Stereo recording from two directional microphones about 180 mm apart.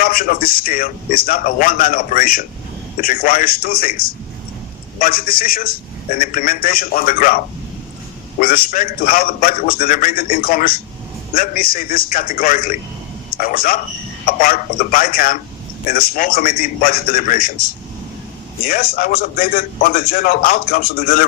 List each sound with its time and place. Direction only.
0.0 s a man's voice: 55° left (ahead or behind)
18.6 s a man's voice: 50° left (ahead or behind)